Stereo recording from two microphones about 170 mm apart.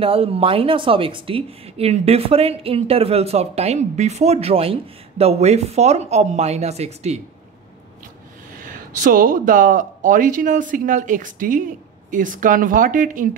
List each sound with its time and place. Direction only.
0.0 s speech: 35° right (ahead or behind)
8.5 s speech: 55° right (ahead or behind)